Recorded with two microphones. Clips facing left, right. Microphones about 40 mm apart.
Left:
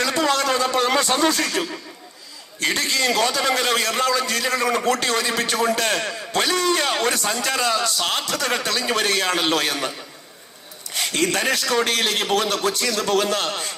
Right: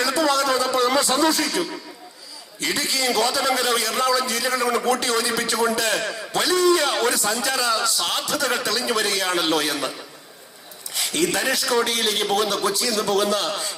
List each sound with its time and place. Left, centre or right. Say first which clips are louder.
0.0 s a sound: even; left
2.6 s a man's voice: left 3 dB; left
10.9 s a man's voice: left 1 dB; left